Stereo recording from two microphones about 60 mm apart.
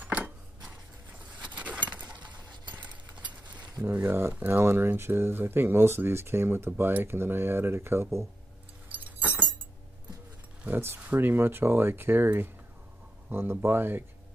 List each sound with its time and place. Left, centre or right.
0.0 s a sound: right
3.9 s speech: right
8.8 s keys jangling: right
10.6 s speech: right